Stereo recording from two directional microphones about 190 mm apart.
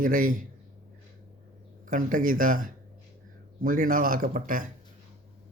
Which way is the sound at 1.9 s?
45° right (ahead or behind).